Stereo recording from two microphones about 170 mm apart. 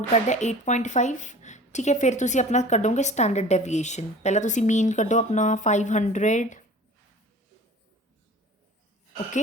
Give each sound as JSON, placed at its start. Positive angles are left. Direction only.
{"t": 0.1, "sound": "a woman's voice", "side_deg": 45}